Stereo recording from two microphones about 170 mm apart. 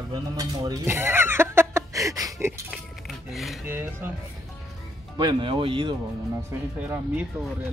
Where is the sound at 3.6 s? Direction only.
15° right (ahead or behind).